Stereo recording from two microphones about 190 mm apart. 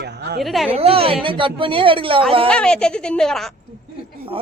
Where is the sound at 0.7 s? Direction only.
30° right (ahead or behind).